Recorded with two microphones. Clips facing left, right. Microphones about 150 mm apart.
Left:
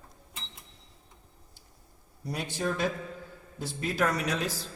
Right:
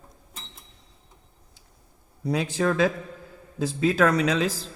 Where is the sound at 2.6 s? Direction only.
90° right.